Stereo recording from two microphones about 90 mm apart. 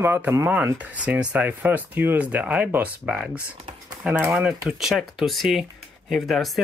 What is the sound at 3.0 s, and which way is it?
Speech, 5° right (ahead or behind).